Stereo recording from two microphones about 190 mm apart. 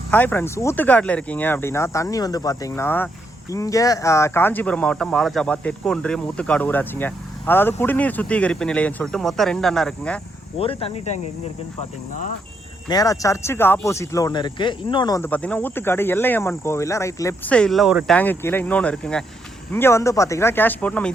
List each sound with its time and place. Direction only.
0.1 s speech: 10° left (ahead or behind)
10.6 s speech: 30° left (ahead or behind)
12.9 s speech: 20° left (ahead or behind)
17.5 s speech: 5° left (ahead or behind)
18.2 s speech: 10° left (ahead or behind)